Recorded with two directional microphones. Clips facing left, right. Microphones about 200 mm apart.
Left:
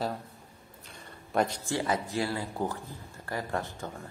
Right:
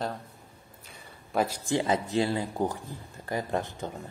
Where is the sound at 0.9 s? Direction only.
5° right (ahead or behind).